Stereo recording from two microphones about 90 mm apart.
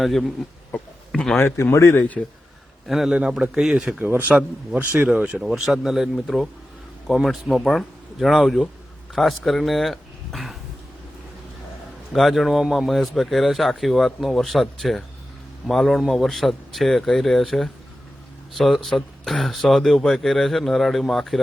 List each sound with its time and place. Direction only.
0.0 s speech: centre (ahead or behind)
0.7 s a sound: 10° left (ahead or behind)
1.4 s speech: 25° left (ahead or behind)
2.8 s speech: 5° right (ahead or behind)
4.0 s a man's voice: 20° right (ahead or behind); by 10.6 s centre (ahead or behind)
12.1 s speech: centre (ahead or behind)